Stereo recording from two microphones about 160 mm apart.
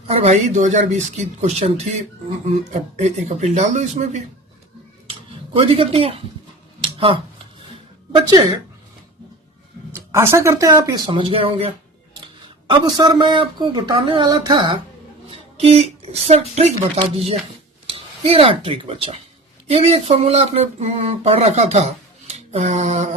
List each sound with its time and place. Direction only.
0.1 s speech: 40° right (ahead or behind)
5.5 s speech: 35° right (ahead or behind)
6.8 s finger snapping: 35° right (ahead or behind)
9.9 s speech: 15° right (ahead or behind); by 23.1 s 45° right (ahead or behind)